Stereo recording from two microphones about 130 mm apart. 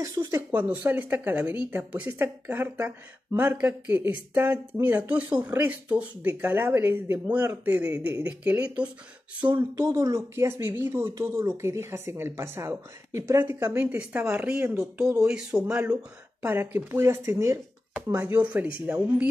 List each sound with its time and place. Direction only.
0.0 s speech: 25° right (ahead or behind)
0.6 s speech: 15° right (ahead or behind)
9.5 s speech: 25° right (ahead or behind); by 15.7 s 5° right (ahead or behind)
16.4 s speech: 15° right (ahead or behind)